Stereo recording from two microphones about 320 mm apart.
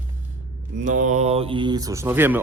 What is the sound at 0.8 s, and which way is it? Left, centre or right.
Speech, right.